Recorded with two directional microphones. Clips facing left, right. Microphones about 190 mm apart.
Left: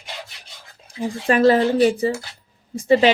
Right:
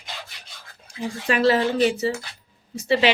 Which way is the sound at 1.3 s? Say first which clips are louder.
Left 4 dB; 45° left (ahead or behind).